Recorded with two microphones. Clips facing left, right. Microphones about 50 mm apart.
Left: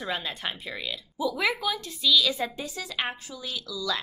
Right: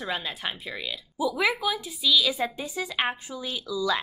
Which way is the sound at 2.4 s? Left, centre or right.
Right.